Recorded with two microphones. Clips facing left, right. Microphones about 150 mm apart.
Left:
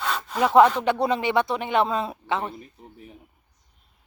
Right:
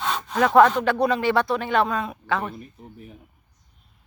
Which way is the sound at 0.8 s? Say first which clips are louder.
Right 2 dB; 20° left (ahead or behind).